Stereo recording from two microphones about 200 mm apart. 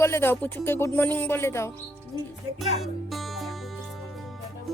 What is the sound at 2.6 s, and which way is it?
Speech, centre (ahead or behind).